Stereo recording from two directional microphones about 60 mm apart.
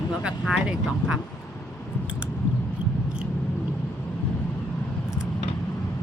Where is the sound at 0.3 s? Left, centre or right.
Centre.